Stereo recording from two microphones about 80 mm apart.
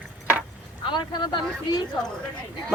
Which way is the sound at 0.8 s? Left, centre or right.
Left.